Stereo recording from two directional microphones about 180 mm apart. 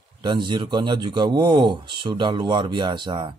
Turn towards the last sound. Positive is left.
turn(degrees=-25)  # may be behind; listen again after turning